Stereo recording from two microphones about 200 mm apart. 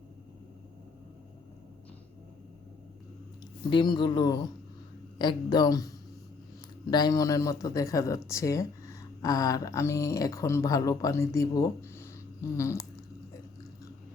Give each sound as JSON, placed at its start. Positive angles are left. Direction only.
{"t": 3.7, "sound": "a man's voice", "side_deg": 25}
{"t": 6.9, "sound": "speech", "side_deg": 20}